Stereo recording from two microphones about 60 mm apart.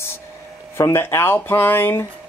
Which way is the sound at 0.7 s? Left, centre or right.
Left.